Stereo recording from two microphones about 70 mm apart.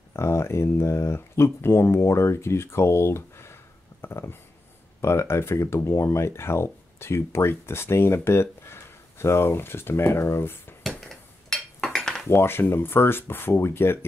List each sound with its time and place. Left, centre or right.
0.1 s speech: left
10.9 s dishes: centre
12.3 s speech: left